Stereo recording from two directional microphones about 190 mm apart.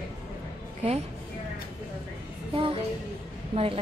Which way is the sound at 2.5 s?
30° right (ahead or behind).